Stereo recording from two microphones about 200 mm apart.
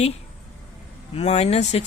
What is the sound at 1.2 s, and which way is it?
Speech, 30° left (ahead or behind).